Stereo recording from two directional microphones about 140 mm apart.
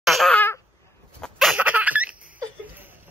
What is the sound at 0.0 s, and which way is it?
Babbling, centre (ahead or behind).